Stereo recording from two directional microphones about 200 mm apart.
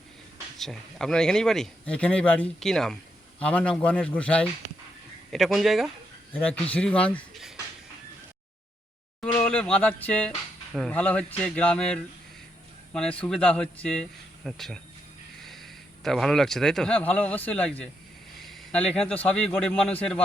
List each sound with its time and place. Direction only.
0.6 s speech: centre (ahead or behind)
9.2 s a man's voice: 5° left (ahead or behind)